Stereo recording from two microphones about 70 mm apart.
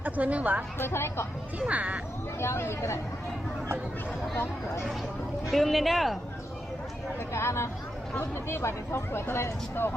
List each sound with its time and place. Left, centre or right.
0.0 s a woman's voice: right
0.8 s speech: left
1.5 s a woman's voice: right
2.4 s speech: left
5.5 s speech: centre
7.3 s speech: left